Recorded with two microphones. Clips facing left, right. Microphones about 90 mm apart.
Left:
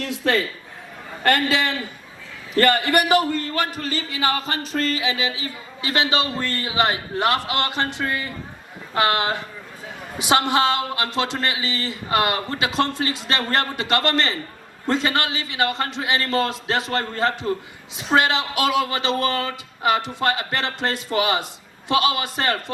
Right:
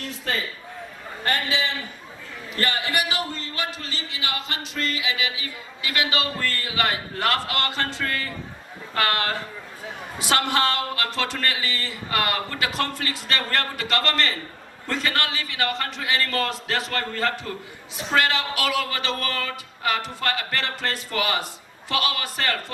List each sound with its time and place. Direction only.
0.1 s a man's voice: 70° left (ahead or behind); by 22.6 s 20° left (ahead or behind)